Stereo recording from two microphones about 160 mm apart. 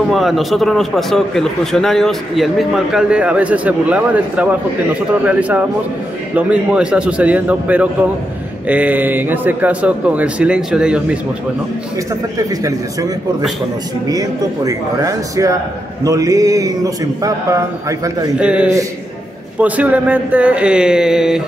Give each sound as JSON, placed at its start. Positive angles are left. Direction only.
{"t": 0.1, "sound": "a man's voice", "side_deg": 0}
{"t": 12.4, "sound": "a man's voice", "side_deg": -20}
{"t": 18.4, "sound": "a man's voice", "side_deg": -5}